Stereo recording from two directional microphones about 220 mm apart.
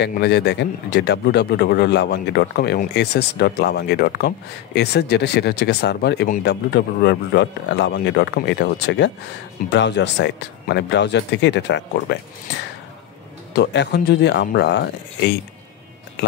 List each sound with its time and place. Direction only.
0.0 s a man's voice: 50° left (ahead or behind)
13.5 s a man's voice: 50° left (ahead or behind)